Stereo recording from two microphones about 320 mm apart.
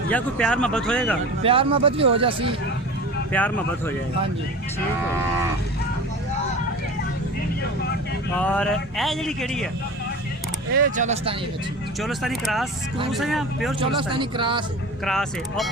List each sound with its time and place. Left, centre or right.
0.1 s speech: centre
1.4 s speech: centre
3.3 s speech: centre
8.4 s speech: centre
10.7 s speech: right
11.9 s speech: centre
13.7 s speech: centre
15.0 s speech: centre